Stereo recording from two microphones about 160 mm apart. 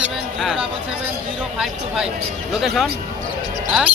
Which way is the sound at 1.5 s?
5° right (ahead or behind).